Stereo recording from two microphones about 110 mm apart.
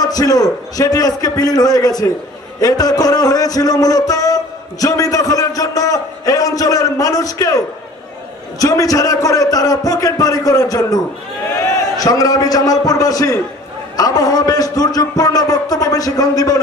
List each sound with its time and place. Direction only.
0.0 s a man's voice: 35° left (ahead or behind)
2.6 s a sound: 35° left (ahead or behind)
8.5 s a man's voice: 30° left (ahead or behind)